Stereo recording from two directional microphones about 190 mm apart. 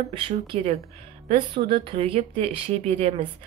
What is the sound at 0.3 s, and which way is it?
A woman's voice, 35° right (ahead or behind).